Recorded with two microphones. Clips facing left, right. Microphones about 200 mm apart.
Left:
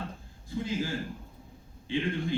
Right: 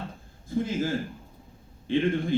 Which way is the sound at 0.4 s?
50° right (ahead or behind).